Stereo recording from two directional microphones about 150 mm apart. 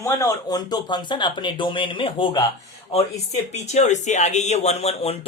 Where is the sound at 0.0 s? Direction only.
20° left (ahead or behind).